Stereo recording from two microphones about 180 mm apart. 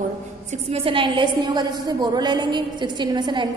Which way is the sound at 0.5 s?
30° right (ahead or behind).